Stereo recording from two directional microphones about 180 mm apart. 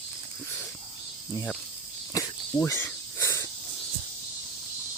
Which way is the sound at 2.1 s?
20° left (ahead or behind).